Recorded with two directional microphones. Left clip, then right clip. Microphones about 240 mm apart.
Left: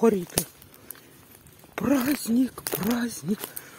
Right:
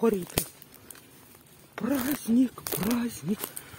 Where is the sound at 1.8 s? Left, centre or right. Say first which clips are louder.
Left 5 dB; left; by 3.5 s centre.